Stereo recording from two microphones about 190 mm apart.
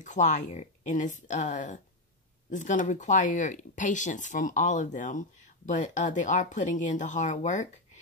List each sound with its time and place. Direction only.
0.0 s speech: 40° left (ahead or behind)